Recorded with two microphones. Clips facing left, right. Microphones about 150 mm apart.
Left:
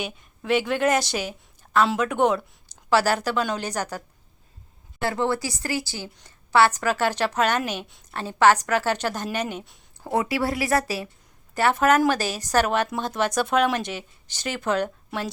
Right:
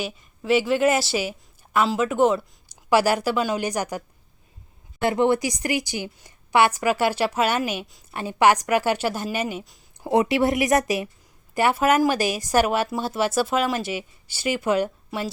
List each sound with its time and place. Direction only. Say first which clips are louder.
0.0 s a woman's voice: right 2 dB; centre (ahead or behind)
5.0 s speech: right 5 dB; 20° right (ahead or behind)
10.0 s speech: right 5 dB; 20° right (ahead or behind)